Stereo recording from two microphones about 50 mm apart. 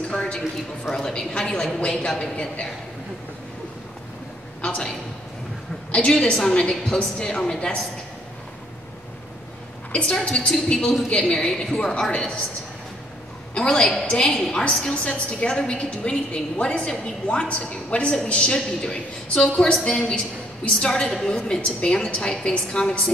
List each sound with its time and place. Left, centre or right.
0.1 s a sound: centre
0.9 s a woman's voice: centre
4.6 s a woman's voice: centre
9.9 s a woman's voice: centre
13.6 s a woman's voice: centre
13.8 s a woman's voice: centre